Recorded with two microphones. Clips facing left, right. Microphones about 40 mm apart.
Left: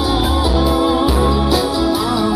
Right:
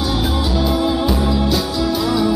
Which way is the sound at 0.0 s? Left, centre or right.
Centre.